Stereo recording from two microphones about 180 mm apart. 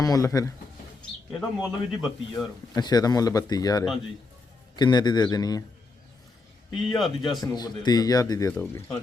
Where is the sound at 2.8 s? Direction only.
20° left (ahead or behind).